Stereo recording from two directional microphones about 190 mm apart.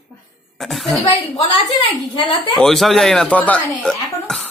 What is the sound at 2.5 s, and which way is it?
Speech, centre (ahead or behind).